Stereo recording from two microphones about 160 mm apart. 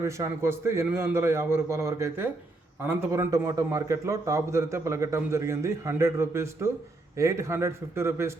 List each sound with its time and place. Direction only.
0.0 s a man's voice: 15° right (ahead or behind)